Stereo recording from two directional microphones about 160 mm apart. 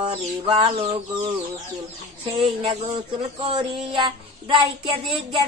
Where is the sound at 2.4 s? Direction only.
35° right (ahead or behind).